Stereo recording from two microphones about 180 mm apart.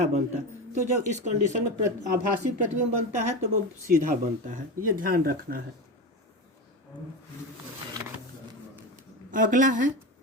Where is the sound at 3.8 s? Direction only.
45° right (ahead or behind).